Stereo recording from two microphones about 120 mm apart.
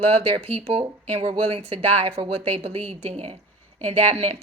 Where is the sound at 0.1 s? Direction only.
55° right (ahead or behind).